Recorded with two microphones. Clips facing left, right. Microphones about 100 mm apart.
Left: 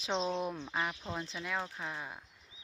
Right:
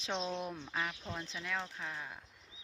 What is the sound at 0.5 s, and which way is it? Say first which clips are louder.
Speech: left 3 dB; 10° left (ahead or behind).